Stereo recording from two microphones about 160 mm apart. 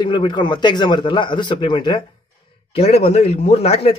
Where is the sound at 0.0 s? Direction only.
30° left (ahead or behind).